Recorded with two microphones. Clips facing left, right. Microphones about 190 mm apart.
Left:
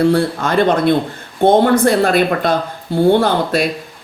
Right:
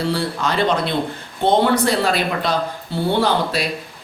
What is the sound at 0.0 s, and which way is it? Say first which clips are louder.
Speech: left 7 dB; 55° left (ahead or behind).